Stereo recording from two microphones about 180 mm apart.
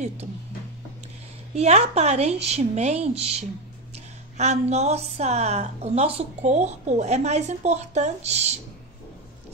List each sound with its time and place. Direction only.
1.5 s a woman's voice: 35° right (ahead or behind)